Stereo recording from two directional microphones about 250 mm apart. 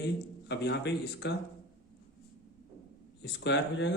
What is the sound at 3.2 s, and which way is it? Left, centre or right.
Speech, left.